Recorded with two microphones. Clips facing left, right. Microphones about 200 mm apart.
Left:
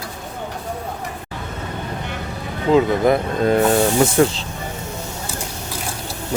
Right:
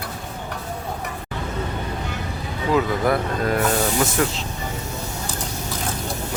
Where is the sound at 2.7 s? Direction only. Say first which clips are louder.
Left 5 dB; 25° left (ahead or behind).